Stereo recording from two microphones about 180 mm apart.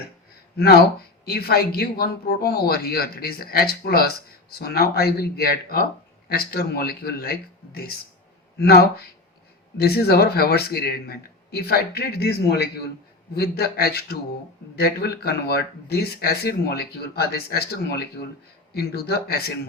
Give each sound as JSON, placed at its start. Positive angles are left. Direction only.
{"t": 0.5, "sound": "speech", "side_deg": 60}